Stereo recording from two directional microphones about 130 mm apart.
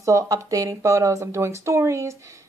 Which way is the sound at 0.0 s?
25° right (ahead or behind).